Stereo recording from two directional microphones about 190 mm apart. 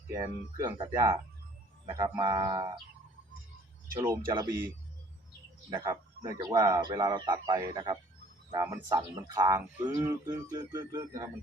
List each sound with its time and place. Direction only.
0.1 s speech: 20° right (ahead or behind)
4.3 s speech: 15° right (ahead or behind)
5.7 s speech: 20° right (ahead or behind)